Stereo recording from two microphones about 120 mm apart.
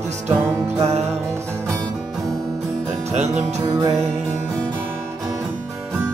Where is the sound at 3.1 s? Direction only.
70° right (ahead or behind).